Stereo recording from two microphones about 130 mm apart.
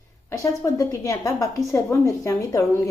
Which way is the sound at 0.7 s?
25° left (ahead or behind).